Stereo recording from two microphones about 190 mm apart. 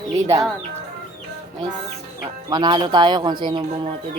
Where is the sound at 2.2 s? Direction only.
20° right (ahead or behind).